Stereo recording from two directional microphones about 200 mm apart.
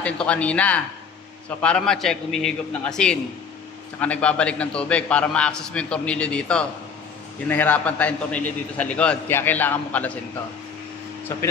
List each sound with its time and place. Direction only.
0.0 s a man's voice: 5° left (ahead or behind)